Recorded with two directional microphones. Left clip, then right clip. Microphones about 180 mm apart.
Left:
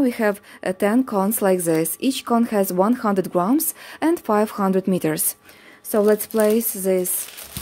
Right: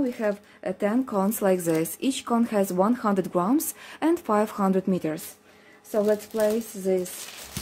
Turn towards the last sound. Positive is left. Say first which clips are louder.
# left 6 dB
turn(degrees=75)  # may be behind; listen again after turning